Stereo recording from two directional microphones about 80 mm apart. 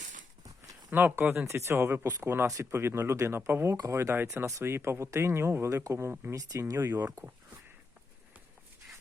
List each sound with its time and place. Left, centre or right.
0.9 s speech: right
6.3 s speech: right
6.7 s speech: right
7.0 s speech: right